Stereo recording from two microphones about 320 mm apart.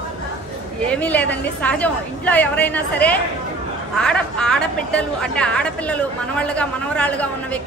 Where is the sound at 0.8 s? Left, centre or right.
Centre.